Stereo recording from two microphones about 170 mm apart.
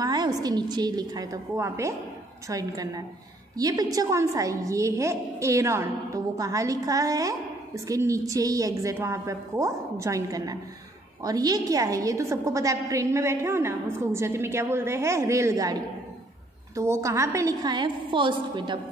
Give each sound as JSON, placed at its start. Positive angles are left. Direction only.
{"t": 0.0, "sound": "a woman's voice", "side_deg": -25}